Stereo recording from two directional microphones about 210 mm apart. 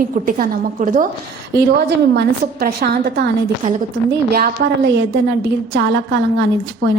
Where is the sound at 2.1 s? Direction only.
50° right (ahead or behind).